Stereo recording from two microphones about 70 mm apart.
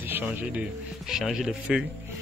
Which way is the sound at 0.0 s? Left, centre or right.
Right.